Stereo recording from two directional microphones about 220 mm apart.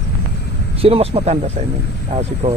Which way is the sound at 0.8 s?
25° right (ahead or behind).